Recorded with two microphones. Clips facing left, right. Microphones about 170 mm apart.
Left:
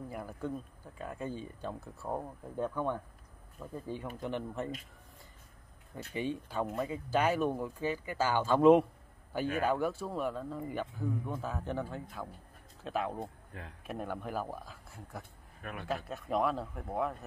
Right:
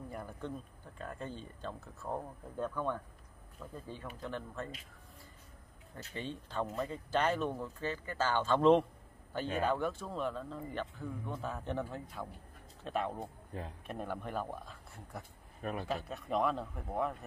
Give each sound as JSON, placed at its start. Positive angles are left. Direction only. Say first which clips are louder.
{"t": 0.1, "sound": "speech", "louder": "left 4 dB", "side_deg": 5}
{"t": 6.1, "sound": "speech", "louder": "left 4 dB", "side_deg": 10}
{"t": 13.5, "sound": "speech", "louder": "right 8 dB", "side_deg": -35}
{"t": 13.8, "sound": "speech", "louder": "left 4 dB", "side_deg": 5}
{"t": 15.6, "sound": "speech", "louder": "right 5 dB", "side_deg": -35}
{"t": 15.9, "sound": "speech", "louder": "left 5 dB", "side_deg": 0}